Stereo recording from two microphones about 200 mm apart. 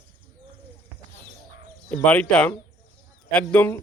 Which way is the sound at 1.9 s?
5° left (ahead or behind).